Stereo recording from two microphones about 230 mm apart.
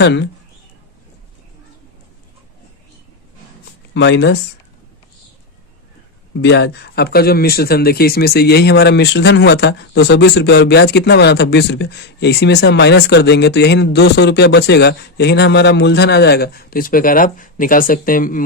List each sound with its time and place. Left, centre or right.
0.0 s speech: left
3.9 s speech: left
6.4 s speech: left